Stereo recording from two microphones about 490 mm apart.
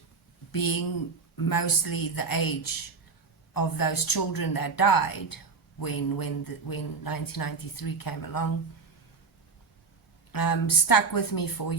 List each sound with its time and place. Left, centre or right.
0.5 s speech: left
10.3 s speech: left